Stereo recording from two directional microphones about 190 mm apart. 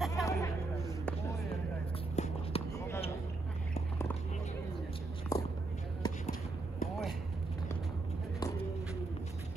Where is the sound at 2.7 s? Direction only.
15° left (ahead or behind).